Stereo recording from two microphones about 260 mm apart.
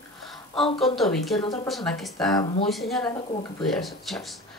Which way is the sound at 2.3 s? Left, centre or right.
Centre.